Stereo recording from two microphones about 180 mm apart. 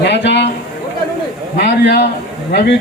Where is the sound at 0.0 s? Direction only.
70° left (ahead or behind).